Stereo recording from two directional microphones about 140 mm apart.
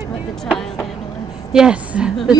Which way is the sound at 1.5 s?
5° right (ahead or behind).